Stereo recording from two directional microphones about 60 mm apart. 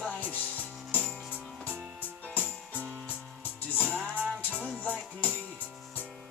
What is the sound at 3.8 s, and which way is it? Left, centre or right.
Music, right.